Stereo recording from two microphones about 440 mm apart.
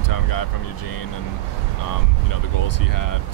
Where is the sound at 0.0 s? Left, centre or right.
Left.